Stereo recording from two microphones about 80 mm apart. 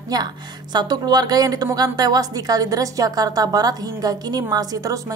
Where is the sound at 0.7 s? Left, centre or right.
Right.